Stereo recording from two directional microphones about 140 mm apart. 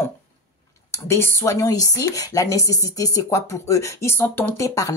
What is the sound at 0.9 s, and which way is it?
A woman's voice, 20° left (ahead or behind).